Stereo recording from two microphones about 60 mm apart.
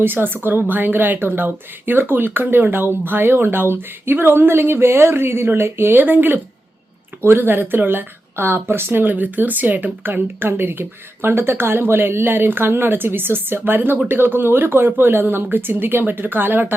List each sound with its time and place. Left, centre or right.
0.0 s speech: right